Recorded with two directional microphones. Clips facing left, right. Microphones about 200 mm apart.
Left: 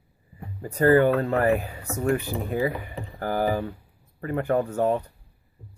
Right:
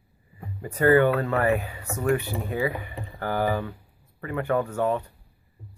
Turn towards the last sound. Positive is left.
turn(degrees=35)  # may be behind; listen again after turning